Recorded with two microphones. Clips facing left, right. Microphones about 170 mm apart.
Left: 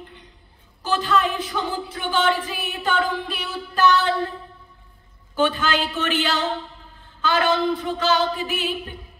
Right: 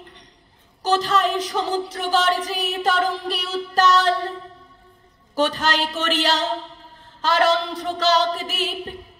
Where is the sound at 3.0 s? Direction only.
90° right.